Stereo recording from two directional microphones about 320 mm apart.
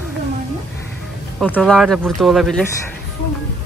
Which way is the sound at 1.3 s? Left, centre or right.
Centre.